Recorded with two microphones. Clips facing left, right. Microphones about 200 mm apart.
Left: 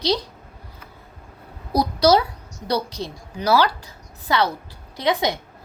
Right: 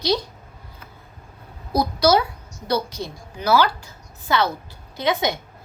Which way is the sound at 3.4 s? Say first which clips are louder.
Even; 35° left (ahead or behind).